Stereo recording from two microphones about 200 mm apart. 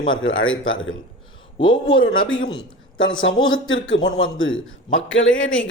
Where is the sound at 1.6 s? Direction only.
25° left (ahead or behind).